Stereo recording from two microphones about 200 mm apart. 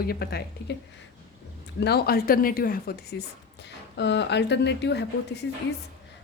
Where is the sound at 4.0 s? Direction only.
60° left (ahead or behind).